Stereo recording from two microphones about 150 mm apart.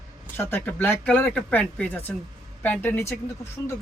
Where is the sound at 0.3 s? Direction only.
15° left (ahead or behind).